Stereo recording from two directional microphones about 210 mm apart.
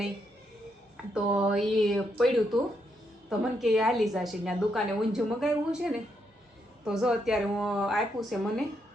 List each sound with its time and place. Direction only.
1.1 s a woman's voice: 5° right (ahead or behind)